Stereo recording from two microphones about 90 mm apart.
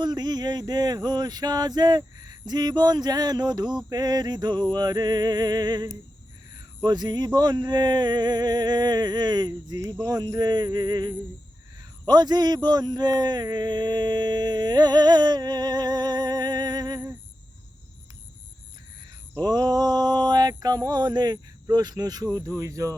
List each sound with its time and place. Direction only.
0.0 s mantra: 50° right (ahead or behind)
11.8 s a man's voice: 50° right (ahead or behind)
19.4 s mantra: 50° right (ahead or behind)